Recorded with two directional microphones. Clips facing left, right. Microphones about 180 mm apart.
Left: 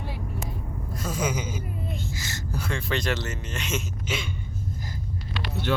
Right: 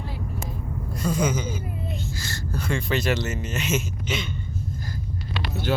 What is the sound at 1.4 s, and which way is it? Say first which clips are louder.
Speech: right 2 dB; 15° left (ahead or behind).